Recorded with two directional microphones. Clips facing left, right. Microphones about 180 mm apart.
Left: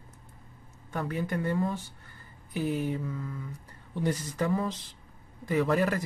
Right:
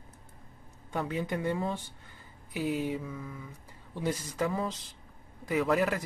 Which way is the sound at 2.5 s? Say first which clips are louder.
Left 1 dB; 15° right (ahead or behind).